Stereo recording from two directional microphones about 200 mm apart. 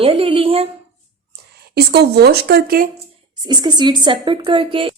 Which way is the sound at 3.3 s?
20° right (ahead or behind).